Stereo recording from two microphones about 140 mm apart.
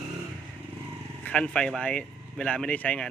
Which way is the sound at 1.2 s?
10° left (ahead or behind).